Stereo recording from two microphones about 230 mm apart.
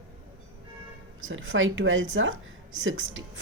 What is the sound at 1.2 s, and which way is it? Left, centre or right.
A woman's voice, right.